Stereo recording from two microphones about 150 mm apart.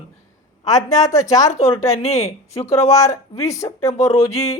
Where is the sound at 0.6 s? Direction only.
25° left (ahead or behind).